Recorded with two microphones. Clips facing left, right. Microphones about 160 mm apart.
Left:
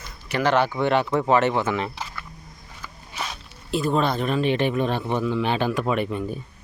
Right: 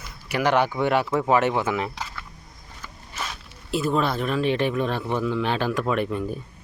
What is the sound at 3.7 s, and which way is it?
Speech, 5° right (ahead or behind).